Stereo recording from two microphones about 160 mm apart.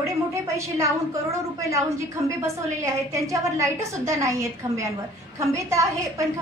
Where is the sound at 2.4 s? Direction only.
20° right (ahead or behind).